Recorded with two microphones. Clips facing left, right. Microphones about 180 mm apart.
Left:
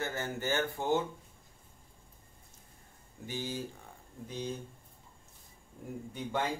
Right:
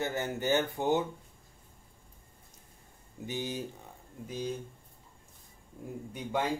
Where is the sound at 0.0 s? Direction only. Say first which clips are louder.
Right 3 dB; 20° right (ahead or behind).